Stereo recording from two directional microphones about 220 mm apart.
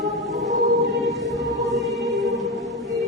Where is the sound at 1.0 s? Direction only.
Centre (ahead or behind).